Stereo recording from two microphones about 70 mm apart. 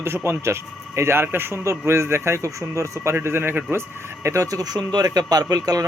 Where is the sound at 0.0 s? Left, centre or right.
Right.